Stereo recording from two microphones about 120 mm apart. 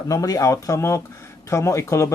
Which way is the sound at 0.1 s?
30° left (ahead or behind).